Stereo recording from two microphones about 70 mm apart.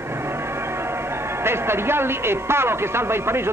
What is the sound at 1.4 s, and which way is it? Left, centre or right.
Speech, right.